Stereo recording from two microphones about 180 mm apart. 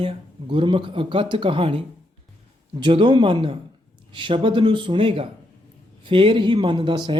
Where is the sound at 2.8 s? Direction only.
25° right (ahead or behind).